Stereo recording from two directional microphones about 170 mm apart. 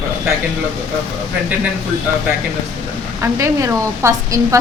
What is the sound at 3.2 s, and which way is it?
A woman's voice, 20° right (ahead or behind).